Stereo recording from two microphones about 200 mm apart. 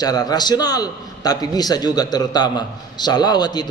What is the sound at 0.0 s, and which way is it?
A man's voice, 20° left (ahead or behind).